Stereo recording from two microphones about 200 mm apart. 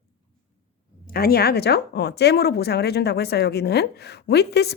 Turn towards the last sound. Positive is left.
turn(degrees=55)  # may be behind; listen again after turning